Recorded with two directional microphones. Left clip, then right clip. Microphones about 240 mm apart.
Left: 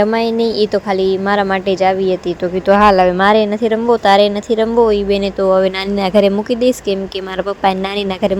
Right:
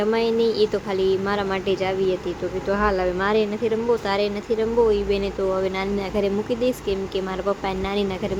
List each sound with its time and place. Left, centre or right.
0.0 s speech: left